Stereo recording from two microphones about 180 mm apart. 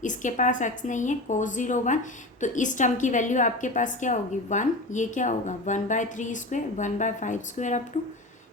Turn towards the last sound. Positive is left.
turn(degrees=40)  # may be behind; listen again after turning